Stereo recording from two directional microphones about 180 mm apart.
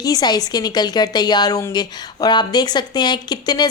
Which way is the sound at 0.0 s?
20° left (ahead or behind).